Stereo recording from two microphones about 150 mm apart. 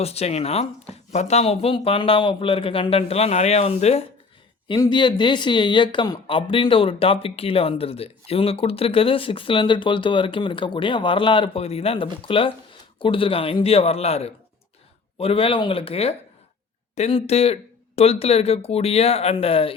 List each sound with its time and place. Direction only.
0.0 s speech: 45° left (ahead or behind)
4.7 s speech: 30° left (ahead or behind)